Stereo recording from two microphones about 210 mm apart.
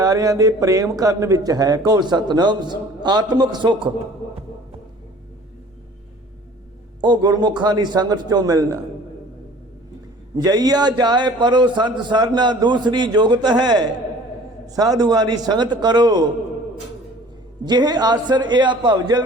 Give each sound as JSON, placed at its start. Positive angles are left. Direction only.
{"t": 0.0, "sound": "a man's voice", "side_deg": -15}
{"t": 7.0, "sound": "a man's voice", "side_deg": -20}
{"t": 10.3, "sound": "a man's voice", "side_deg": -15}
{"t": 17.6, "sound": "a man's voice", "side_deg": -20}